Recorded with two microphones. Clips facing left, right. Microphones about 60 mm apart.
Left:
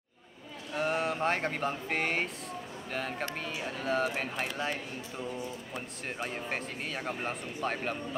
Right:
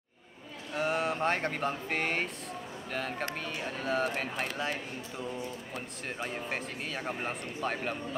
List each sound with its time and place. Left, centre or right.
0.7 s speech: centre